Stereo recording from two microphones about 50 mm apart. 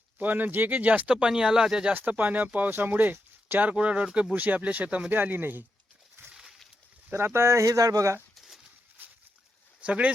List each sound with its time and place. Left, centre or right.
0.2 s speech: right
1.0 s speech: centre
1.9 s speech: right
5.1 s speech: right
6.3 s a sound: centre
7.1 s speech: right
8.4 s a sound: centre
9.8 s speech: right